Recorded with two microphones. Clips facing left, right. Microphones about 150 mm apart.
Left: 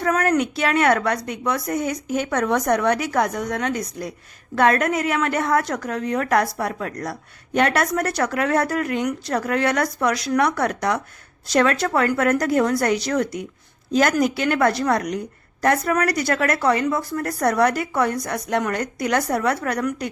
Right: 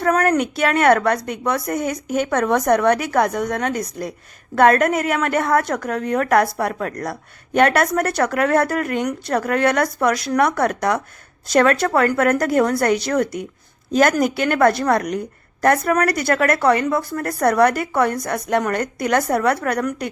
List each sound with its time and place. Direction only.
0.0 s a woman's voice: 50° right (ahead or behind)